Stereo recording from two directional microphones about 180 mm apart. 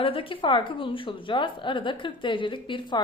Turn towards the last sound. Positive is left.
turn(degrees=25)  # may be behind; listen again after turning